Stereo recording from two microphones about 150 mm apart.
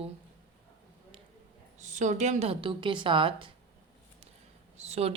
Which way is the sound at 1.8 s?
55° right (ahead or behind).